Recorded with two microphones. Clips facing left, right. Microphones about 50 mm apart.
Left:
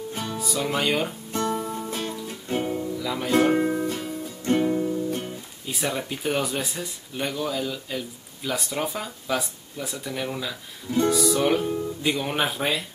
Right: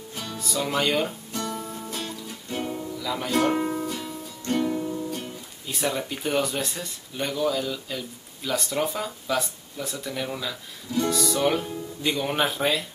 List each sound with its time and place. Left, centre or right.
0.1 s music: left
0.4 s speech: centre
1.3 s music: left
2.6 s music: centre
5.7 s speech: centre
11.1 s music: centre
11.4 s speech: centre